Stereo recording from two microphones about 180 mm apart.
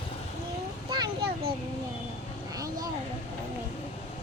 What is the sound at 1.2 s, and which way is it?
Vehicle, 60° right (ahead or behind).